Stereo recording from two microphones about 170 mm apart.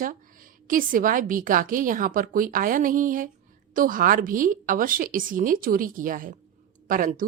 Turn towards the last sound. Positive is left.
turn(degrees=-55)  # may be behind; listen again after turning